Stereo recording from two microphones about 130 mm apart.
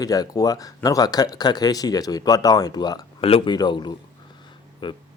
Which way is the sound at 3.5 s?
35° left (ahead or behind).